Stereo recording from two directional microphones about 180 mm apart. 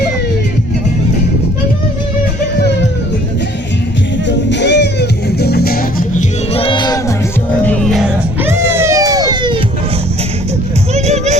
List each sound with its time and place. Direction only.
4.3 s music: 80° left; by 6.2 s 50° left (ahead or behind)
6.5 s music: 30° left (ahead or behind)
7.6 s music: 5° left (ahead or behind)
8.4 s music: 15° right (ahead or behind)
10.9 s music: 40° right (ahead or behind)